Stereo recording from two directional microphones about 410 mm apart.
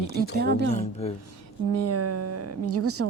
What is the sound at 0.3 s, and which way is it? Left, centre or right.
Speech, right.